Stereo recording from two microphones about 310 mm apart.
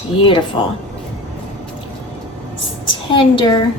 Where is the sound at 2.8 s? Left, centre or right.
Centre.